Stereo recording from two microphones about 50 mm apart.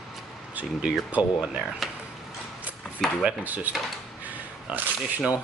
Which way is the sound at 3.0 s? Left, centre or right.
Centre.